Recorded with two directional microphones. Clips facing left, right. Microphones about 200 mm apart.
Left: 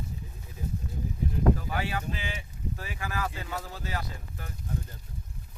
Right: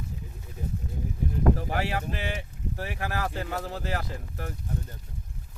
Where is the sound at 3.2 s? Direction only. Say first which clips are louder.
Right 4 dB; 50° right (ahead or behind).